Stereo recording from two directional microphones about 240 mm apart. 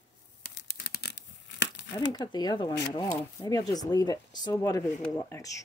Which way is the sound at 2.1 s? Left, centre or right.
Centre.